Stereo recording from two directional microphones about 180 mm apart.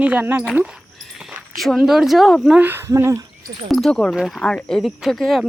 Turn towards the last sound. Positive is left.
turn(degrees=0)  # may be behind; listen again after turning